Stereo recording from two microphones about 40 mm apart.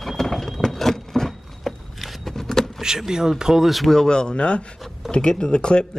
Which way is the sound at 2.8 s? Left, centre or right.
Centre.